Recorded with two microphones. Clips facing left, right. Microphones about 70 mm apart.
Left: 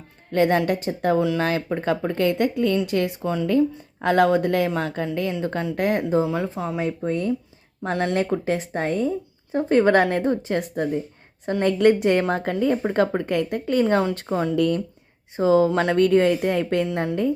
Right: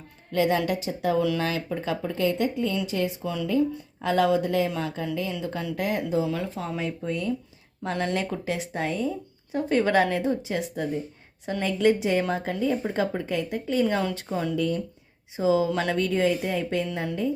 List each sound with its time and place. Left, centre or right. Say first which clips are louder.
0.3 s speech: left 4 dB; left
6.2 s speech: left 4 dB; left
6.8 s speech: left 5 dB; left
13.8 s speech: left 5 dB; left
14.5 s speech: left 6 dB; left
15.4 s speech: left 5 dB; left